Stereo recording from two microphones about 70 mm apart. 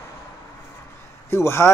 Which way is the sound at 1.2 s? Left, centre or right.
Left.